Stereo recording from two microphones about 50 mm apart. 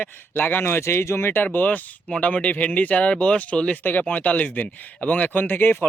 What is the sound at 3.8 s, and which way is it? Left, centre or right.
Speech, left.